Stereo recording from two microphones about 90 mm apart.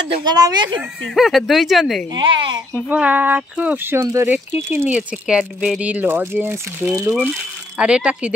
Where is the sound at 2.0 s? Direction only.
65° right (ahead or behind).